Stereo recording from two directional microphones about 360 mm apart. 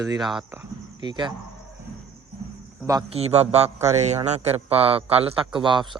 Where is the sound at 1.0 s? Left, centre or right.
Centre.